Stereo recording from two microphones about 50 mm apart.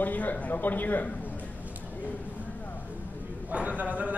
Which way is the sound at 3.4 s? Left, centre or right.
Right.